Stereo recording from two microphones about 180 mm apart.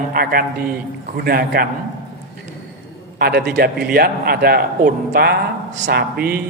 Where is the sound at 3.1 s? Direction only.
60° right (ahead or behind).